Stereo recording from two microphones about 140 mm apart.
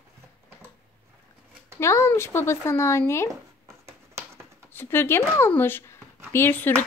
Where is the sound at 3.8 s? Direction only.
20° right (ahead or behind).